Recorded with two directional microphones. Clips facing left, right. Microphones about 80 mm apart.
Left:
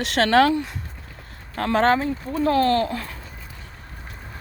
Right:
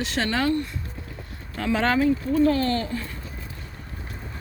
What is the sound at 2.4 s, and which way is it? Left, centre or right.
Speech, left.